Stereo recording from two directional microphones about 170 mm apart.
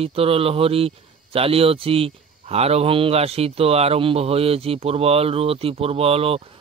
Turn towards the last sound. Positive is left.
turn(degrees=-35)  # may be behind; listen again after turning